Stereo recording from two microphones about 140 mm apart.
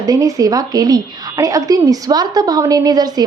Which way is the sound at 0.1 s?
25° right (ahead or behind).